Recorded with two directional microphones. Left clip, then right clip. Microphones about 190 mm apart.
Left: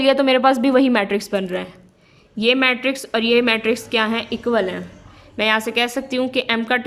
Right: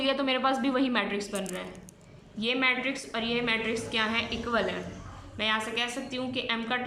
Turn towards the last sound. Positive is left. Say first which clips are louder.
# left 11 dB
turn(degrees=50)  # may be behind; listen again after turning